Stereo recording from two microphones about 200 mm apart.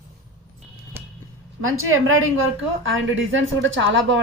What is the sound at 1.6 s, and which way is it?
Speech, 90° right.